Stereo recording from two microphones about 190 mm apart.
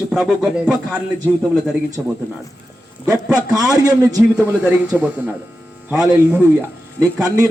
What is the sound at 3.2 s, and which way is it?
Speech, 5° right (ahead or behind).